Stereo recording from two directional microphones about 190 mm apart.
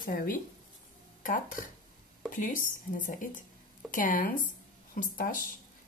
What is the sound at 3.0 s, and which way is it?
Speech, 45° left (ahead or behind).